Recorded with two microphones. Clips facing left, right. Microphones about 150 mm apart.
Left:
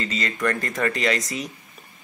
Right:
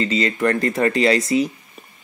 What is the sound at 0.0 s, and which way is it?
Speech, 30° right (ahead or behind).